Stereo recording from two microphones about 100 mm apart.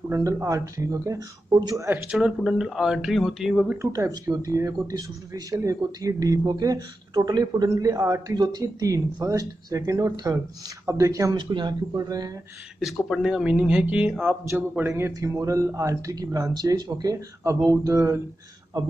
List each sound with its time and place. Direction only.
0.1 s speech: 30° right (ahead or behind)
2.0 s speech: 5° right (ahead or behind)
3.7 s speech: 30° right (ahead or behind)
11.3 s speech: 50° right (ahead or behind)
11.9 s speech: 35° right (ahead or behind)
12.8 s a man's voice: 5° right (ahead or behind); by 18.2 s 30° right (ahead or behind)